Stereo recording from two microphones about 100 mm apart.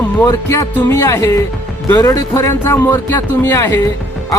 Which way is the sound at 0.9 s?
30° left (ahead or behind).